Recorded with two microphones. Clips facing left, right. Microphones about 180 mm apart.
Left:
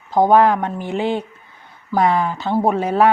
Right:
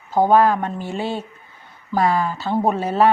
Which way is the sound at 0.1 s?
15° left (ahead or behind).